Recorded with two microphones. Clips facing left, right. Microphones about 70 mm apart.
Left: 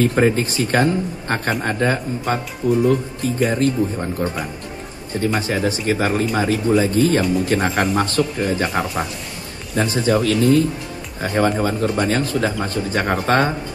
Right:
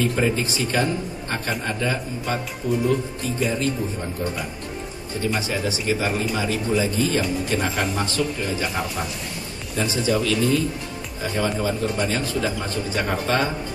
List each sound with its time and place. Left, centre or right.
0.0 s speech: left